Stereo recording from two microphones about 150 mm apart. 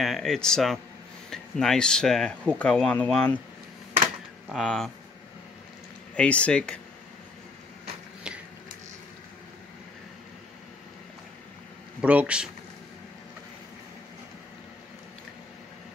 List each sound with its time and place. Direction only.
0.0 s speech: centre (ahead or behind)
4.5 s speech: centre (ahead or behind)
6.1 s speech: 10° left (ahead or behind)
12.0 s speech: 10° right (ahead or behind)